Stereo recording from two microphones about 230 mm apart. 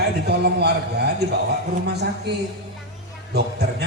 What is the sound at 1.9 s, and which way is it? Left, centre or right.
Speech, right.